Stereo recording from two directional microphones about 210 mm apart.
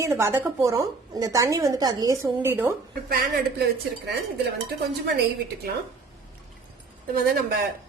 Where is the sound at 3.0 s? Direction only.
45° right (ahead or behind).